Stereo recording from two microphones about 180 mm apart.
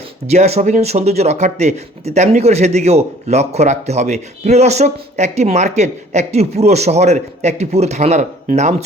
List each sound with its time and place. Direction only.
0.3 s speech: 35° right (ahead or behind)